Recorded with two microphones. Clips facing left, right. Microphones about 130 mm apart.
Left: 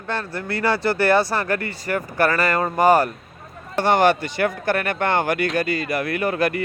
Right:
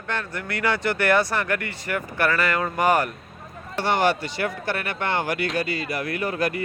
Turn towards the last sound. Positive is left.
turn(degrees=60)  # may be behind; listen again after turning